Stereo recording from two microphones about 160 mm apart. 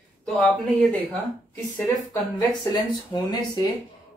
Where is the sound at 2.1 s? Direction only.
25° left (ahead or behind).